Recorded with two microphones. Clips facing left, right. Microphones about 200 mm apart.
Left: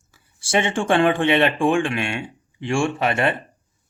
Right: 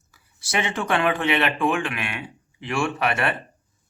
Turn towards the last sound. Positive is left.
turn(degrees=25)  # may be behind; listen again after turning